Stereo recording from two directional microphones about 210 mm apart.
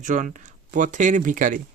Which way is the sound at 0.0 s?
40° right (ahead or behind).